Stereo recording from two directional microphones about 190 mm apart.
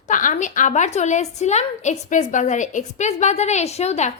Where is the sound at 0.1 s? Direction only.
45° left (ahead or behind).